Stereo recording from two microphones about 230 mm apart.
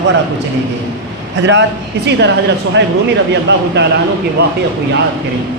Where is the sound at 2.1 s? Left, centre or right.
Right.